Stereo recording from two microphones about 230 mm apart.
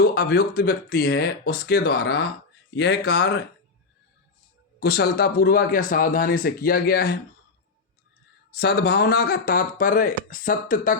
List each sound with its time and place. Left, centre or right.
0.0 s speech: left
4.8 s a man's voice: left
8.5 s a man's voice: left